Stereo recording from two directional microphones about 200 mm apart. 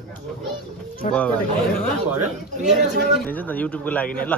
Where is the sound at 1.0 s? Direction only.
35° left (ahead or behind).